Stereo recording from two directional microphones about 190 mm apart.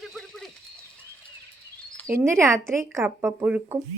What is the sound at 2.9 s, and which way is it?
Speech, 10° right (ahead or behind).